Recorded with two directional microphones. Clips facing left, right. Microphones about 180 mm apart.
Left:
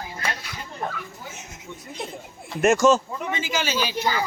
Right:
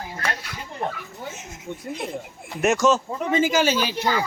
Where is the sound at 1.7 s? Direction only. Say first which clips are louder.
Right 7 dB; 55° right (ahead or behind).